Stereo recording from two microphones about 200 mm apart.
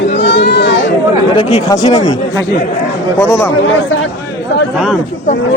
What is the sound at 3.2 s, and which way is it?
Speech, 10° left (ahead or behind).